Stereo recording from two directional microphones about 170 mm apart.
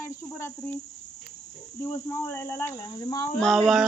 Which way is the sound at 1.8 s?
15° left (ahead or behind).